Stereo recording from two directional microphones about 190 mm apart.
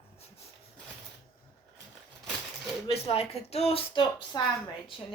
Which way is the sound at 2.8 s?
30° left (ahead or behind).